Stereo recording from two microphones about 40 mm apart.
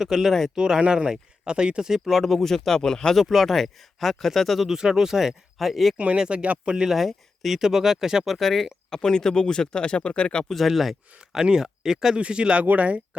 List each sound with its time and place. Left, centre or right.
0.0 s speech: centre
1.8 s speech: centre
2.2 s speech: centre
3.2 s speech: centre
6.1 s speech: right
6.8 s speech: centre
8.4 s speech: centre
8.9 s speech: centre
10.5 s speech: centre
11.4 s speech: centre
12.1 s speech: right
12.6 s speech: right